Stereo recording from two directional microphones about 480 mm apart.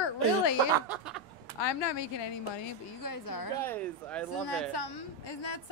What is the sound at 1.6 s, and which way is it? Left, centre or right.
Speech, left.